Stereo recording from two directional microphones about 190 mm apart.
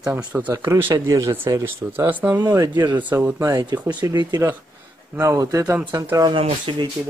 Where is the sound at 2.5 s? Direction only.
25° right (ahead or behind).